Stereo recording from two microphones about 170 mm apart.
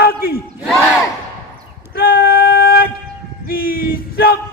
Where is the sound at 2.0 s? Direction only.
60° left (ahead or behind).